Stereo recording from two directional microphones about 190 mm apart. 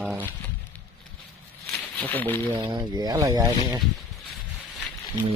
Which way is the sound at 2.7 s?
20° right (ahead or behind).